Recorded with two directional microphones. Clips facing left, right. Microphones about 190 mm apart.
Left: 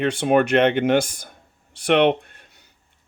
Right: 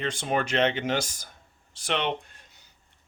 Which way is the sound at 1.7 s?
60° left (ahead or behind).